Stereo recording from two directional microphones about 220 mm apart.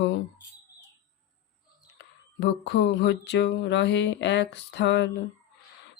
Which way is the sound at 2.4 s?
50° left (ahead or behind).